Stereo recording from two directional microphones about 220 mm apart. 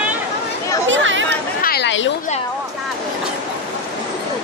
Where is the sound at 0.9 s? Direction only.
60° right (ahead or behind).